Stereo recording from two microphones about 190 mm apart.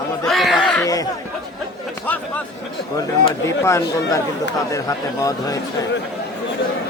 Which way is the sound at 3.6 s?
15° left (ahead or behind).